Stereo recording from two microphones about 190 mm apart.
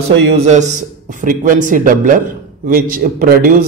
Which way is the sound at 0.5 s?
40° right (ahead or behind).